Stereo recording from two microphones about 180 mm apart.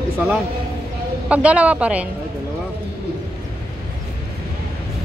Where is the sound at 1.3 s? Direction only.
5° right (ahead or behind).